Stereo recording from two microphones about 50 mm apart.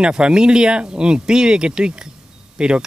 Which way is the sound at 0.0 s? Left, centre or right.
Centre.